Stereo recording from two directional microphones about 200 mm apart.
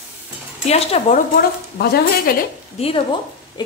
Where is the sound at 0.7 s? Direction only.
30° left (ahead or behind).